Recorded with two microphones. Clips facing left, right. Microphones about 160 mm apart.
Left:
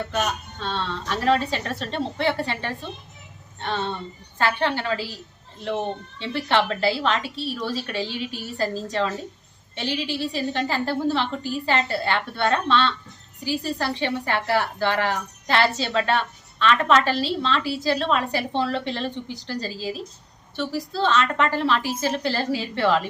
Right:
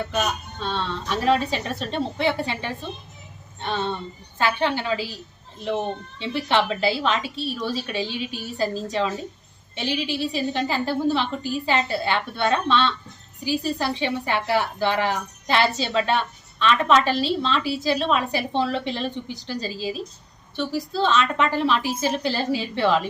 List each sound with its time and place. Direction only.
0.1 s a woman's voice: 10° right (ahead or behind)